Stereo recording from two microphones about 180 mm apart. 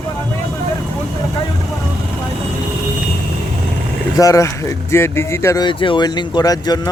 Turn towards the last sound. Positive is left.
turn(degrees=20)  # may be behind; listen again after turning